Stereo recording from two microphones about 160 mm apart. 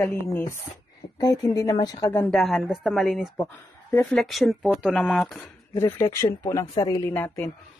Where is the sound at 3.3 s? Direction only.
15° left (ahead or behind).